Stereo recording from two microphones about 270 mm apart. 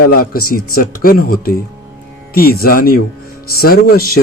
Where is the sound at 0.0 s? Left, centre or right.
Left.